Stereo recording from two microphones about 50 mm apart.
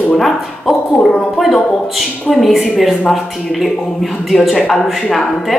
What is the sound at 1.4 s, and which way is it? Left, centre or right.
Speech, centre.